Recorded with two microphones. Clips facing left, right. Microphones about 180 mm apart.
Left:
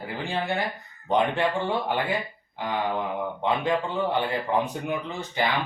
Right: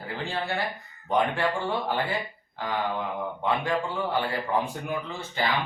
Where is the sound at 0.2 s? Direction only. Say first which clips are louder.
Left 2 dB; 15° left (ahead or behind).